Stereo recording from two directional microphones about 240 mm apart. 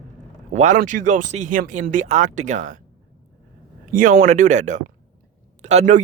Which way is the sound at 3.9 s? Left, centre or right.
Right.